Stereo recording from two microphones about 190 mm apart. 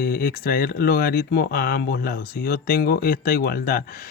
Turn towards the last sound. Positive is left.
turn(degrees=50)  # may be behind; listen again after turning